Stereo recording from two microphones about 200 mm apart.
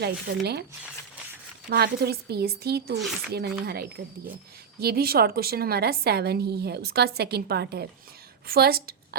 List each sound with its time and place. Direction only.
0.0 s a woman's voice: 55° right (ahead or behind)
1.7 s a woman's voice: 55° right (ahead or behind)